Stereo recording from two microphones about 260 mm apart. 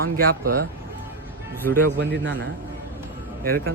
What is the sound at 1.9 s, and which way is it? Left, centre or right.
Speech, right.